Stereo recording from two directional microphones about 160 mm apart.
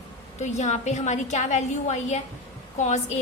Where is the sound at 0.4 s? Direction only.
45° left (ahead or behind).